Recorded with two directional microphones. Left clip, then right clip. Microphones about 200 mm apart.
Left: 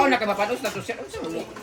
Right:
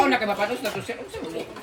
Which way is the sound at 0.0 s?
Centre (ahead or behind).